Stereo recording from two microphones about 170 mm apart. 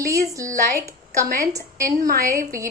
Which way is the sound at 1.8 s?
55° right (ahead or behind).